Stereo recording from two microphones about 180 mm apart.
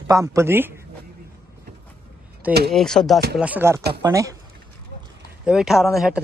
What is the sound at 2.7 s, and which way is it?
Speech, 5° left (ahead or behind).